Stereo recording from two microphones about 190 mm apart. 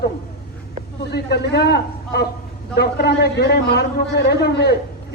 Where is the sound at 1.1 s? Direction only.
60° left (ahead or behind).